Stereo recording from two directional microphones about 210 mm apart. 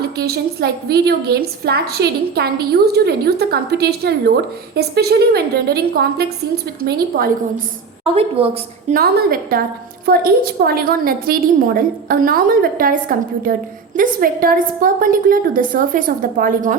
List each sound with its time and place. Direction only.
0.2 s a woman's voice: 50° right (ahead or behind)
8.4 s a woman's voice: 25° right (ahead or behind)
8.9 s a woman's voice: 45° right (ahead or behind)